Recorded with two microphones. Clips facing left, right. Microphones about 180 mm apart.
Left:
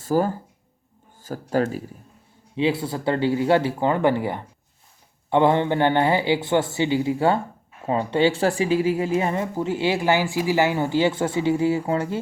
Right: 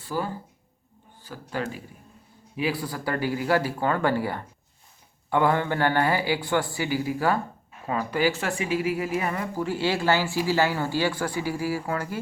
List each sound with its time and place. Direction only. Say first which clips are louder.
0.0 s speech: left 8 dB; 45° left (ahead or behind)
2.6 s speech: left 5 dB; 25° left (ahead or behind)